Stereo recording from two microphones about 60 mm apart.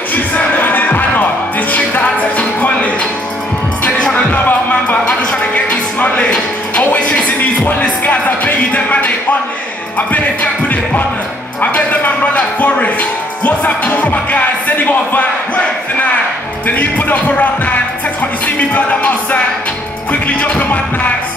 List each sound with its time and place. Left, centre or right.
0.1 s music: left
10.7 s music: left
11.6 s a sound: left
13.4 s music: left
16.6 s music: left